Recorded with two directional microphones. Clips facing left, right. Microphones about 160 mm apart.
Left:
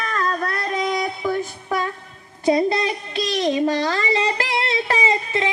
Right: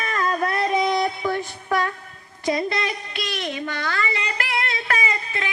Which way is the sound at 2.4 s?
30° left (ahead or behind).